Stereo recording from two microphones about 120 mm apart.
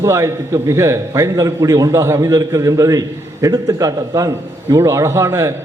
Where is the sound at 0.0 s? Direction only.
25° right (ahead or behind).